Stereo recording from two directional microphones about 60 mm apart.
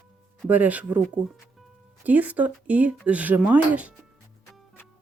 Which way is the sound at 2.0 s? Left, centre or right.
Right.